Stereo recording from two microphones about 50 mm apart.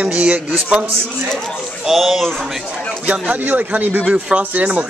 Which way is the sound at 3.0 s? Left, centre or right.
Right.